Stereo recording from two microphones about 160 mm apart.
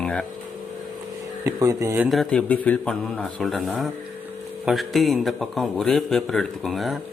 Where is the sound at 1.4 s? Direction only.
20° right (ahead or behind).